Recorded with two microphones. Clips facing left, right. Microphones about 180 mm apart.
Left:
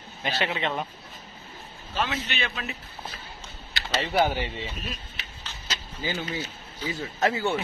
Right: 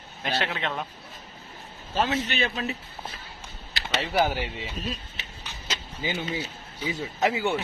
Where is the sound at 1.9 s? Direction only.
35° right (ahead or behind).